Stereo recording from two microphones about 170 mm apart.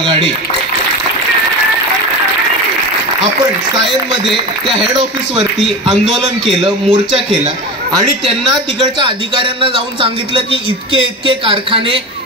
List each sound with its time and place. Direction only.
0.0 s speech: 30° right (ahead or behind)
4.6 s speech: 25° right (ahead or behind)
6.6 s speech: 30° right (ahead or behind)
8.5 s a man's voice: 25° right (ahead or behind)